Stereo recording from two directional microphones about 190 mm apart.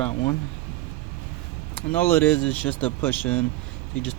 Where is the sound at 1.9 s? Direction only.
10° left (ahead or behind).